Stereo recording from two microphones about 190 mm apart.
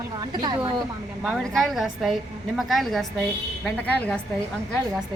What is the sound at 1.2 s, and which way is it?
A woman's voice, centre (ahead or behind).